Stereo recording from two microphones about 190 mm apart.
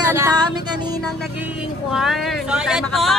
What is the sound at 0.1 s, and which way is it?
Music, 15° right (ahead or behind).